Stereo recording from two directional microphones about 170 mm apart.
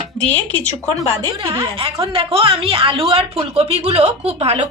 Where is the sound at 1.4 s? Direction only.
30° right (ahead or behind).